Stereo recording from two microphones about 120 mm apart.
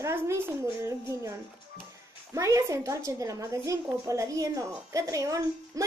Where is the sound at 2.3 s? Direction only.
25° right (ahead or behind).